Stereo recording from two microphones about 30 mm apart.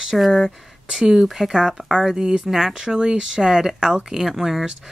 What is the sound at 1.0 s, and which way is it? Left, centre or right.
Speech, centre.